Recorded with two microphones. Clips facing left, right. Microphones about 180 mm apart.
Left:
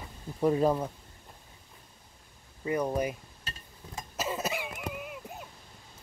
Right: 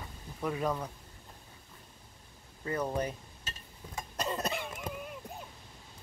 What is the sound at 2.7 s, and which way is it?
Speech, 10° left (ahead or behind).